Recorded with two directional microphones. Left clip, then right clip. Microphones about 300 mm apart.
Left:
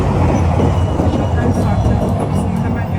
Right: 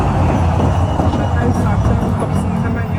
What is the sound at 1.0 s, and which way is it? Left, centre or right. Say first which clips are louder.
Vehicle: left 1 dB; centre.